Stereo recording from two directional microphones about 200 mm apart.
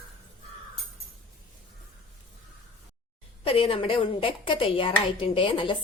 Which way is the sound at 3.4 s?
30° left (ahead or behind).